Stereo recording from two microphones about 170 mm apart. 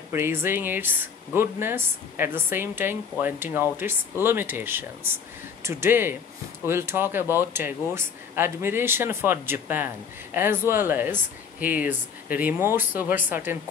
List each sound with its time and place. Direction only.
0.1 s speech: 15° right (ahead or behind)